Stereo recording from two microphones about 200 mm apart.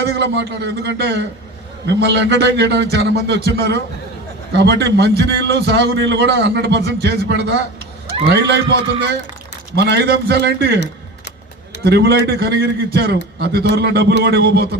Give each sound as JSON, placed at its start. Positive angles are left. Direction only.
{"t": 0.1, "sound": "a man's voice", "side_deg": -60}
{"t": 11.9, "sound": "a man's voice", "side_deg": -55}